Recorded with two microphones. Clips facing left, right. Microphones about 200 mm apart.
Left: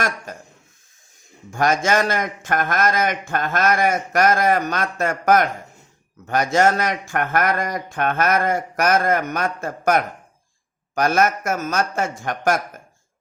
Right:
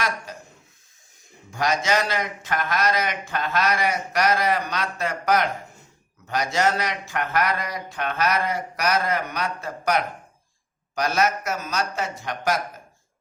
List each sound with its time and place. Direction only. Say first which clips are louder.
0.3 s a man's voice: left 3 dB; 50° left (ahead or behind)
1.5 s a man's voice: left 4 dB; 50° left (ahead or behind)